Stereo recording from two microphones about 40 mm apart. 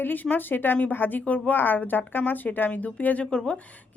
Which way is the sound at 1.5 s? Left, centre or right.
Left.